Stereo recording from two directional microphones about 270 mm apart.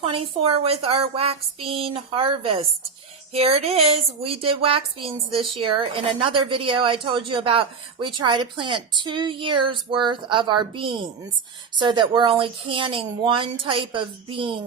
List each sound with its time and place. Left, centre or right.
0.0 s a woman's voice: right